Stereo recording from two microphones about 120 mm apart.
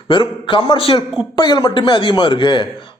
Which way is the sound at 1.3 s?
40° left (ahead or behind).